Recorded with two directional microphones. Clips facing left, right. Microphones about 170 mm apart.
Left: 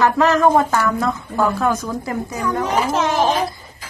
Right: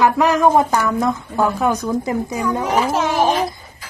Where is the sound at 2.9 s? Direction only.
5° right (ahead or behind).